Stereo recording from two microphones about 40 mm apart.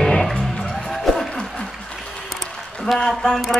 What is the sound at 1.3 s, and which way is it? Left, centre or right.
Applause, left.